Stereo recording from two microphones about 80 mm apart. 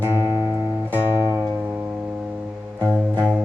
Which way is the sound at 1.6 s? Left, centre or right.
Centre.